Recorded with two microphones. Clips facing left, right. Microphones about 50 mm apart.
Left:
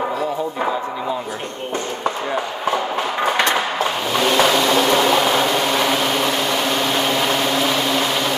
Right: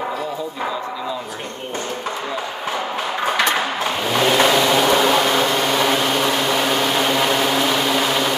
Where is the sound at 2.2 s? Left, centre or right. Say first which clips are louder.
Left 4 dB; left.